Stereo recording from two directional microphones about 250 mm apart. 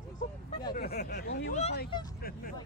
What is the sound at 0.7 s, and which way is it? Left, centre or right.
Speech, left.